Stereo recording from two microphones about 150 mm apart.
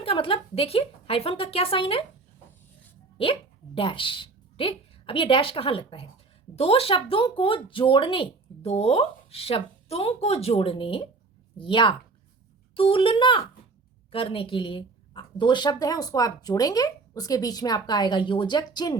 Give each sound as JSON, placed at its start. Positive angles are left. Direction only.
{"t": 0.0, "sound": "speech", "side_deg": 35}
{"t": 3.8, "sound": "a woman's voice", "side_deg": 35}